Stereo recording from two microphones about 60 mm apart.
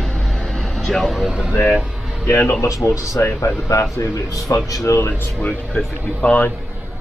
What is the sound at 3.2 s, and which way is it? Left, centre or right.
Speech, left.